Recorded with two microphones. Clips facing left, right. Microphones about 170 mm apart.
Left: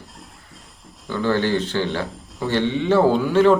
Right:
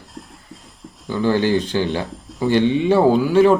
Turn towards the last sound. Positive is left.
turn(degrees=-15)  # may be behind; listen again after turning